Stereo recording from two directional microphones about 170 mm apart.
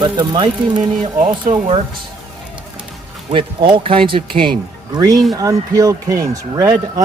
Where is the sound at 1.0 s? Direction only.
40° right (ahead or behind).